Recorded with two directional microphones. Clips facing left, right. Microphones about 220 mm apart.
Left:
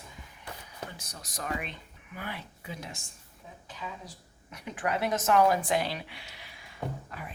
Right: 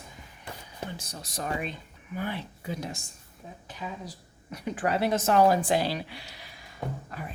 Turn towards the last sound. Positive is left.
turn(degrees=-40)  # may be behind; listen again after turning